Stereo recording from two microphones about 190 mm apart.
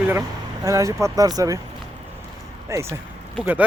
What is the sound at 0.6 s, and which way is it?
Speech, 15° right (ahead or behind).